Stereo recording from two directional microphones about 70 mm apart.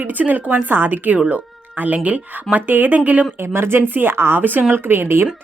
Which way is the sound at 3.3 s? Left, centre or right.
Right.